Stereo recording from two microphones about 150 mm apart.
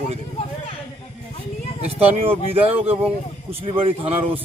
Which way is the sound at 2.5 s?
40° right (ahead or behind).